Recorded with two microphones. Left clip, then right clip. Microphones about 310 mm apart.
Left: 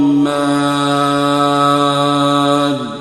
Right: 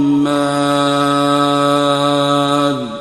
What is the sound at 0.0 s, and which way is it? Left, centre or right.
Mantra, centre.